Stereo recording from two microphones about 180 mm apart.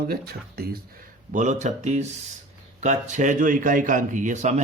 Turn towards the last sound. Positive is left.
turn(degrees=-40)  # may be behind; listen again after turning